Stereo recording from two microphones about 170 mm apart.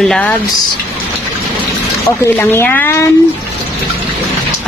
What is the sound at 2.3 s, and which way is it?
Speech, 10° left (ahead or behind).